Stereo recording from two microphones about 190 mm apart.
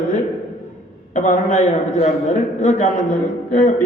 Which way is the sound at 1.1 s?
40° left (ahead or behind).